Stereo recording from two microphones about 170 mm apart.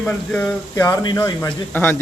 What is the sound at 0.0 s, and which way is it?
Speech, 5° left (ahead or behind).